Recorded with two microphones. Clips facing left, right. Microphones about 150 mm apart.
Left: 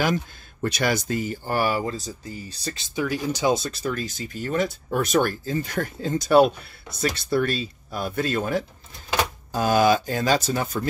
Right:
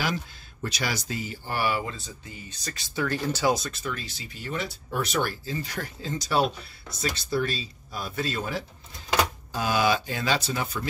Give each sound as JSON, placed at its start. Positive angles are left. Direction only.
{"t": 0.0, "sound": "speech", "side_deg": 50}
{"t": 3.0, "sound": "speech", "side_deg": 15}
{"t": 3.5, "sound": "speech", "side_deg": 35}